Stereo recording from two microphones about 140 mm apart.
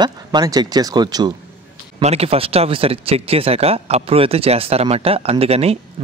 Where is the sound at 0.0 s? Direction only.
30° right (ahead or behind).